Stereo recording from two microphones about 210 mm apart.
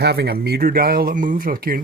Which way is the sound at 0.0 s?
50° right (ahead or behind).